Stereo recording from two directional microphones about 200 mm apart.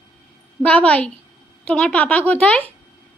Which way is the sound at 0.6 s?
5° left (ahead or behind).